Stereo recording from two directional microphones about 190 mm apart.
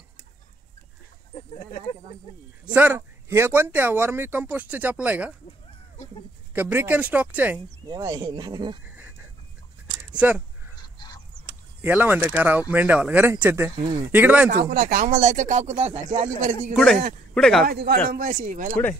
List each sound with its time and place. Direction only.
2.6 s speech: 10° right (ahead or behind)
6.5 s speech: 10° right (ahead or behind)
7.9 s speech: 25° right (ahead or behind)
8.8 s a sound: 10° right (ahead or behind)
10.1 s speech: 5° right (ahead or behind)
11.8 s speech: 10° right (ahead or behind)
14.5 s speech: 45° right (ahead or behind)
16.7 s a man's voice: centre (ahead or behind)
17.6 s speech: 55° right (ahead or behind)
18.1 s speech: 45° right (ahead or behind)